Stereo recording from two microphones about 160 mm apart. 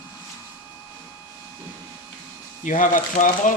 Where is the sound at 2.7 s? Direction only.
55° left (ahead or behind).